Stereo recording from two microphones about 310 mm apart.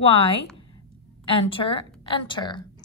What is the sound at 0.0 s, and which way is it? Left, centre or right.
A woman's voice, centre.